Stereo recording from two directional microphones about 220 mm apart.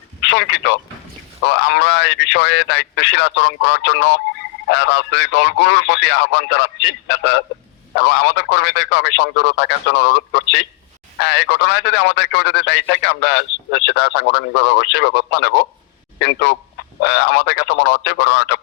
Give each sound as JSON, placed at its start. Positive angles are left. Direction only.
{"t": 0.2, "sound": "a man's voice", "side_deg": 55}